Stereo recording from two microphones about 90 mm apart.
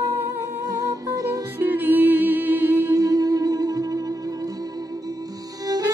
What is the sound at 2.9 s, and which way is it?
Music, 45° right (ahead or behind).